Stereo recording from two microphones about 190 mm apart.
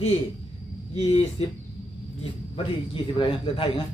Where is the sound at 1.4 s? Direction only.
30° left (ahead or behind).